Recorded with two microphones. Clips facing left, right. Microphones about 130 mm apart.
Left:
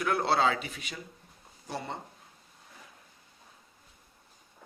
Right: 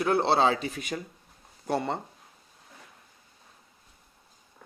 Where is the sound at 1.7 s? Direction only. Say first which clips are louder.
Right 9 dB; 60° right (ahead or behind).